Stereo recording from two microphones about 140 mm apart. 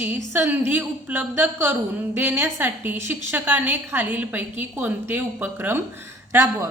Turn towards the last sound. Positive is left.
turn(degrees=-20)  # may be behind; listen again after turning